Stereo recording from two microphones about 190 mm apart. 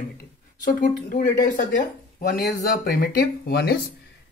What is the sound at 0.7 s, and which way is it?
Speech, 45° left (ahead or behind).